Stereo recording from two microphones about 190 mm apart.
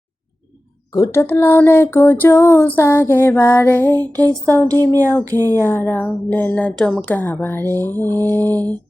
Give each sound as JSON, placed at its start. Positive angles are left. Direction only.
{"t": 0.9, "sound": "speech", "side_deg": 15}
{"t": 4.1, "sound": "a sound", "side_deg": -15}
{"t": 5.4, "sound": "speech", "side_deg": 10}